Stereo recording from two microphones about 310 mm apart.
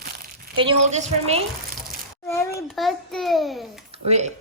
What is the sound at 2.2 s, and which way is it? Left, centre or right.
A child's voice, centre.